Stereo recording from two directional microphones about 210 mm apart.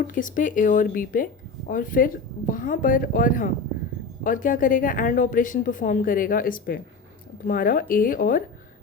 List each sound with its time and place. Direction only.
0.1 s speech: 40° left (ahead or behind)